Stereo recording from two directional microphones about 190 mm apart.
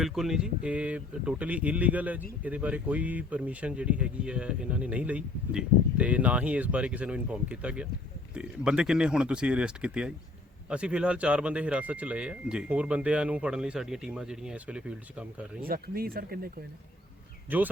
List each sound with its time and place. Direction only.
0.0 s speech: centre (ahead or behind)
15.6 s speech: 50° right (ahead or behind)
17.5 s speech: 10° right (ahead or behind)